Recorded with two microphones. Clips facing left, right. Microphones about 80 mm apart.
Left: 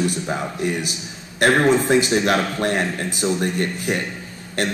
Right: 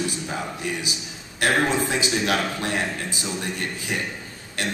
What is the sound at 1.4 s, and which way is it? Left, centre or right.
A man's voice, left.